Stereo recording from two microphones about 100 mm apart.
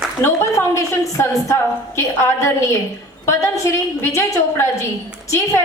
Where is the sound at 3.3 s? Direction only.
30° left (ahead or behind).